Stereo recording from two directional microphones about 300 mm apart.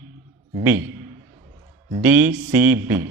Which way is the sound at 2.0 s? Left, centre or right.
Centre.